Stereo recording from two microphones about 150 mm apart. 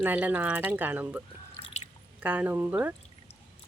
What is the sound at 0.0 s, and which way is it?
Speech, 10° right (ahead or behind).